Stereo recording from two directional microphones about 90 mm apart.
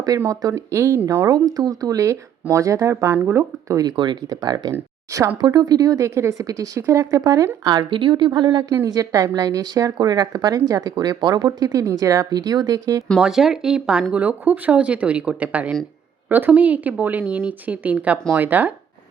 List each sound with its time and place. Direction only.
0.3 s speech: 40° right (ahead or behind)
3.8 s a woman's voice: 55° right (ahead or behind)
4.3 s a woman's voice: 45° right (ahead or behind)
7.7 s a woman's voice: 60° right (ahead or behind)
8.7 s a woman's voice: 40° right (ahead or behind)
12.4 s speech: 45° right (ahead or behind)
13.1 s speech: 5° right (ahead or behind); by 18.7 s 20° right (ahead or behind)